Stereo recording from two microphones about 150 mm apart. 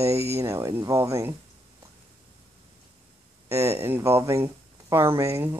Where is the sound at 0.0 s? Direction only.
20° right (ahead or behind).